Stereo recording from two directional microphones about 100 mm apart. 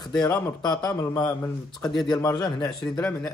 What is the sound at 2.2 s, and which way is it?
Speech, 35° left (ahead or behind).